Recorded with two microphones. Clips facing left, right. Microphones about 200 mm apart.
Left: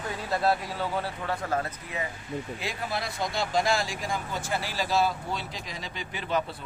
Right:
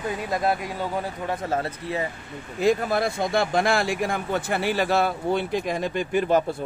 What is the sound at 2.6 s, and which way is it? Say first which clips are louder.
Speech: right 12 dB; 50° right (ahead or behind).